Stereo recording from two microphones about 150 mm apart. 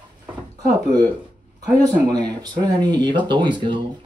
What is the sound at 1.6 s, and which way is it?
A man's voice, 25° right (ahead or behind).